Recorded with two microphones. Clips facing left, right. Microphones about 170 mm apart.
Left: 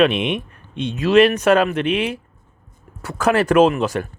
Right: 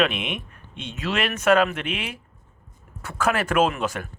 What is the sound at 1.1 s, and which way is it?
Speech, 35° left (ahead or behind).